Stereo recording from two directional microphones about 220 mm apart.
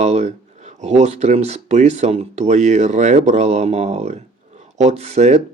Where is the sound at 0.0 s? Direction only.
30° right (ahead or behind).